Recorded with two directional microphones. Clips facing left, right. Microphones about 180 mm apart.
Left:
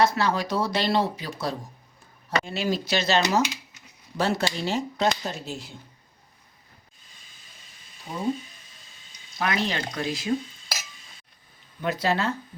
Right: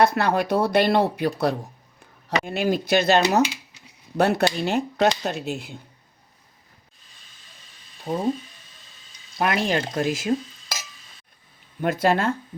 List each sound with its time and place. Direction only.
0.0 s speech: 60° right (ahead or behind)
8.1 s speech: 40° right (ahead or behind)
9.4 s speech: 50° right (ahead or behind)
11.8 s speech: 50° right (ahead or behind)